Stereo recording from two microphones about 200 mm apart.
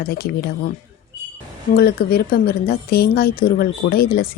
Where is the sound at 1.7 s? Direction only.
50° left (ahead or behind).